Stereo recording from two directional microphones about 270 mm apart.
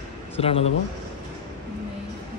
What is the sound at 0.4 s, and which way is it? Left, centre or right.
Speech, left.